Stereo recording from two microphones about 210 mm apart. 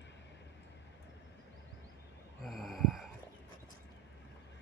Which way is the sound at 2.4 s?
Centre (ahead or behind).